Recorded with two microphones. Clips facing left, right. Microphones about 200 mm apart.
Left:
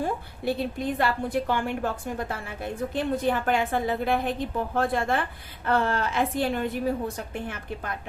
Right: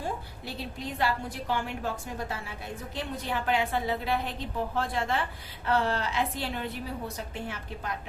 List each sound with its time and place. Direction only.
0.0 s a woman's voice: 55° left (ahead or behind)